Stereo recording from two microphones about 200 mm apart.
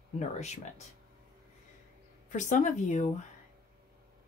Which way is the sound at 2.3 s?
40° left (ahead or behind).